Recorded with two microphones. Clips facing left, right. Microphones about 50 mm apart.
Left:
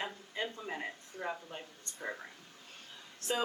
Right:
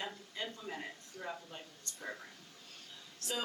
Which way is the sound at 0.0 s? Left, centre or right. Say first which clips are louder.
Left 4 dB; left.